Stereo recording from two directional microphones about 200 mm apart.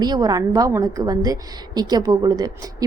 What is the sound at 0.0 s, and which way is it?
A woman's voice, 20° right (ahead or behind).